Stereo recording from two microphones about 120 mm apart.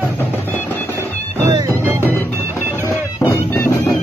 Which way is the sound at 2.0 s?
15° left (ahead or behind).